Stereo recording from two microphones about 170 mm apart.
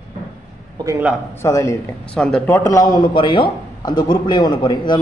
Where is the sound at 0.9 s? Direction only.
10° right (ahead or behind).